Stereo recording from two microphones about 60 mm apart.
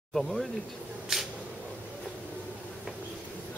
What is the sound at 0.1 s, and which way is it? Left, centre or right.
Speech, centre.